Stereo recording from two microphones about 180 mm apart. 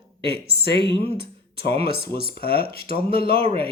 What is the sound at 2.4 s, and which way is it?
Speech, 60° left (ahead or behind).